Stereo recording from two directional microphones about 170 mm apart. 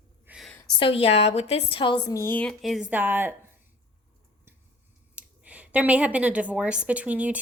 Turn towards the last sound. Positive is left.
turn(degrees=-10)  # may be behind; listen again after turning